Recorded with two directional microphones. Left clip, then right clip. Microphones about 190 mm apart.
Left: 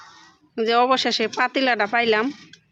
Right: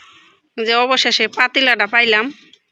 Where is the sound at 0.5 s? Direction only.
5° left (ahead or behind).